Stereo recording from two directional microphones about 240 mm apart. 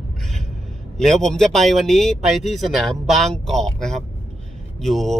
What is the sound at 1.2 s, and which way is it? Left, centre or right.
A man's voice, centre.